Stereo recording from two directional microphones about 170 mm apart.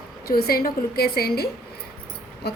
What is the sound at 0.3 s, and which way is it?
A woman's voice, 65° left (ahead or behind).